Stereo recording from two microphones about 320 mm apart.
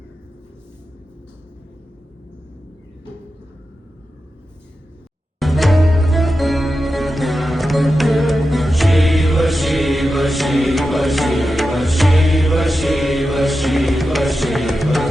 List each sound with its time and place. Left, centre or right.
5.4 s music: centre